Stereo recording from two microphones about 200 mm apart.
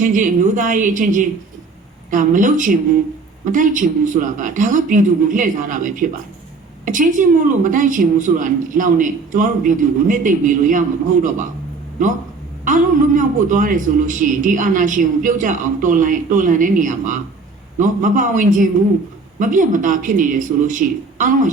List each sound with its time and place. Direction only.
0.0 s a woman's voice: 40° right (ahead or behind)
12.6 s a woman's voice: 40° right (ahead or behind)